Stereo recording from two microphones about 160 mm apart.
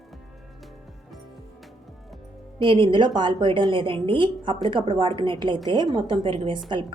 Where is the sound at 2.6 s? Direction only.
30° right (ahead or behind).